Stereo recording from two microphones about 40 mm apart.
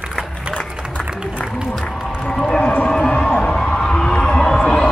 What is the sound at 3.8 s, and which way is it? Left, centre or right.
Heart sounds, centre.